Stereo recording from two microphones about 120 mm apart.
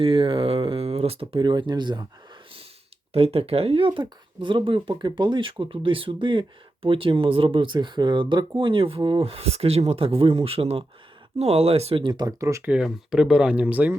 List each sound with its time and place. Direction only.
0.0 s speech: 50° right (ahead or behind)
1.4 s speech: 40° right (ahead or behind)
3.1 s speech: 55° right (ahead or behind)
12.0 s speech: 35° right (ahead or behind)
12.6 s speech: 5° right (ahead or behind)